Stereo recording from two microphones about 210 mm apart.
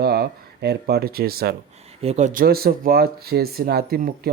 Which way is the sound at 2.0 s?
30° right (ahead or behind).